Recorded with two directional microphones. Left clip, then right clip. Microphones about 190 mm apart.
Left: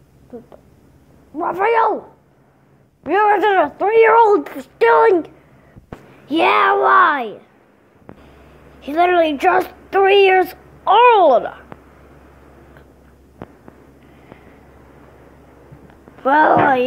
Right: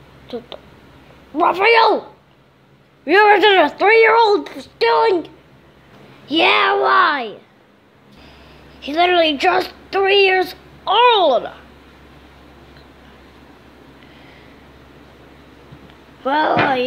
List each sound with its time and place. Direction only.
1.3 s speech: 25° right (ahead or behind)
3.1 s speech: 25° right (ahead or behind)
3.7 s speech: 10° right (ahead or behind)
8.8 s speech: centre (ahead or behind)
16.3 s speech: 5° left (ahead or behind)